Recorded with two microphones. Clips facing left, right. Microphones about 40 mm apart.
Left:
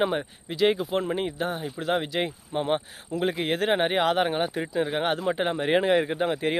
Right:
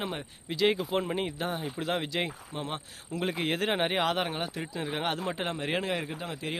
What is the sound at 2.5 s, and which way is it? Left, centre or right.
Speech, left.